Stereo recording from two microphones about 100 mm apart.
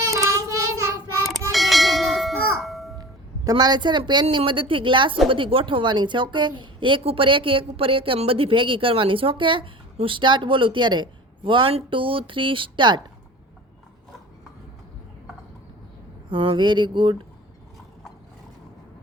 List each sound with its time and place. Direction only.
0.0 s child singing: 30° right (ahead or behind)
1.5 s bell: centre (ahead or behind)
3.5 s a woman's voice: 50° right (ahead or behind)
16.3 s mantra: 55° right (ahead or behind)